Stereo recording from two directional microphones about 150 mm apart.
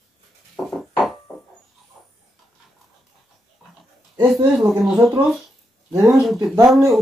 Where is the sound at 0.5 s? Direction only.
Centre (ahead or behind).